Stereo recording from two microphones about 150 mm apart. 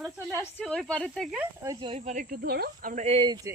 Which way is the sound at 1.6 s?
25° right (ahead or behind).